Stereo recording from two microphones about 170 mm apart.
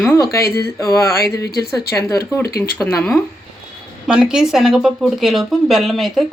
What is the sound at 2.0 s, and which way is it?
Speech, 20° left (ahead or behind).